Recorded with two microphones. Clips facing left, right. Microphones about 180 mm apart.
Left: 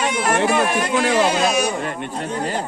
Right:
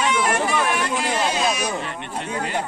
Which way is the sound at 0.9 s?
80° left.